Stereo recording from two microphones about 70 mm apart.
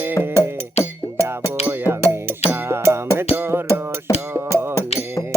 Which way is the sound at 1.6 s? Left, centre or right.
Right.